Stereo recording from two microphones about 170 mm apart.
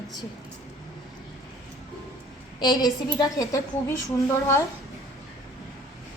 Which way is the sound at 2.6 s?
25° left (ahead or behind).